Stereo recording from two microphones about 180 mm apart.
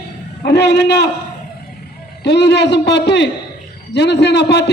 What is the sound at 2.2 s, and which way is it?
A man's voice, 70° left (ahead or behind).